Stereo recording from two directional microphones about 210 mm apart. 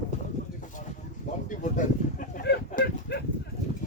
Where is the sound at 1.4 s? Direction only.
40° left (ahead or behind).